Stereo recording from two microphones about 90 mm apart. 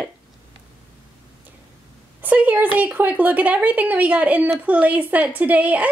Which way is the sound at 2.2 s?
20° right (ahead or behind).